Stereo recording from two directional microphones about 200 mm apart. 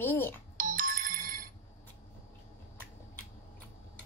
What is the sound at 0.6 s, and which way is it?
Ringtone, 45° right (ahead or behind).